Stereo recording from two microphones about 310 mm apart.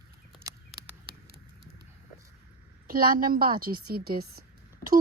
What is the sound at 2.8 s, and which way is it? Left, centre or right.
A woman's voice, right.